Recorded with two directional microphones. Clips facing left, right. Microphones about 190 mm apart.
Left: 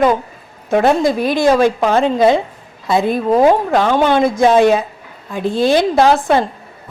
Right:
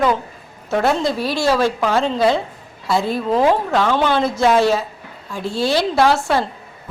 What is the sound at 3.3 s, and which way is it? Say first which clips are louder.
Speech: left 4 dB; 45° left (ahead or behind).